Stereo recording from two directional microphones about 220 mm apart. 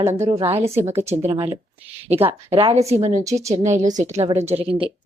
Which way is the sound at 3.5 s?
35° right (ahead or behind).